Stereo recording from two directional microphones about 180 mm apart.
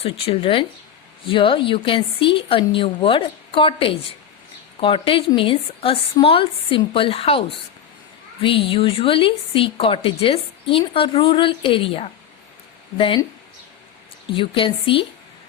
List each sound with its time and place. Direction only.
0.0 s a woman's voice: 30° left (ahead or behind)
14.3 s a woman's voice: 30° left (ahead or behind)